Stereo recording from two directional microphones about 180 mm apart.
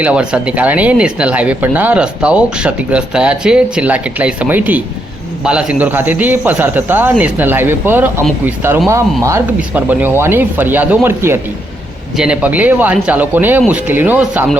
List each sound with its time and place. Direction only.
0.0 s speech: 5° right (ahead or behind)